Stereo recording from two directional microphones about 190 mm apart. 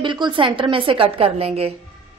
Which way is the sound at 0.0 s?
25° right (ahead or behind).